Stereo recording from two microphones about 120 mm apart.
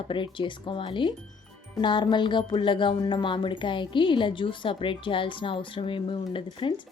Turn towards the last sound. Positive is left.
turn(degrees=45)  # may be behind; listen again after turning